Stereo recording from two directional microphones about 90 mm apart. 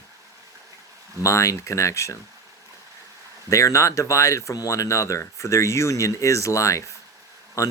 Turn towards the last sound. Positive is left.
turn(degrees=35)  # may be behind; listen again after turning